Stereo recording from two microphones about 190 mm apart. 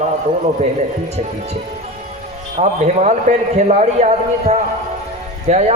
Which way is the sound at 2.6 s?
35° right (ahead or behind).